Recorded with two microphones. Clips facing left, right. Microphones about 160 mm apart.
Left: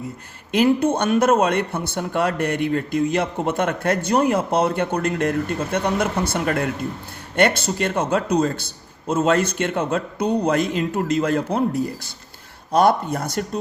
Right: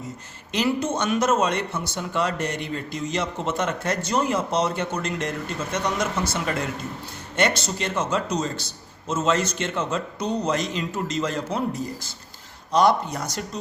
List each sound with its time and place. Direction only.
0.5 s a man's voice: 55° left (ahead or behind)